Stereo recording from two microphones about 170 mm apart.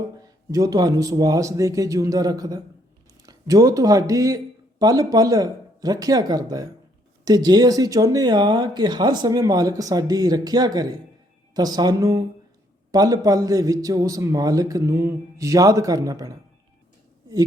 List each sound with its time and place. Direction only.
0.2 s speech: 20° right (ahead or behind)